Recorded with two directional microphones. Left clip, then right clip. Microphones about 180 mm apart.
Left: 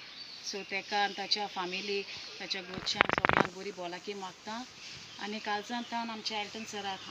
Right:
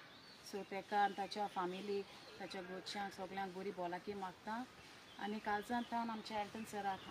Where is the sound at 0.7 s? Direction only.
10° right (ahead or behind).